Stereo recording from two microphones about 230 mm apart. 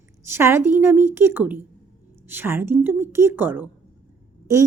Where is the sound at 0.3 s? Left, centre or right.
Centre.